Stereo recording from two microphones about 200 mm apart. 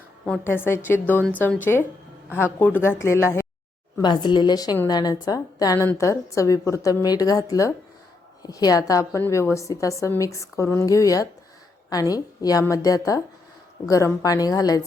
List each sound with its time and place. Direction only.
0.3 s a woman's voice: 10° left (ahead or behind)